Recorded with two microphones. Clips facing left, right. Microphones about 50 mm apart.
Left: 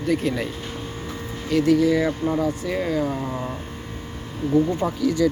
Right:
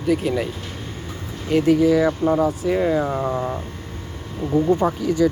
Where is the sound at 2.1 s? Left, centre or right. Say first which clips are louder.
Right 4 dB; right.